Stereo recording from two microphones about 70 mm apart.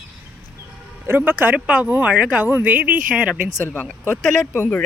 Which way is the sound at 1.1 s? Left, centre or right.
Right.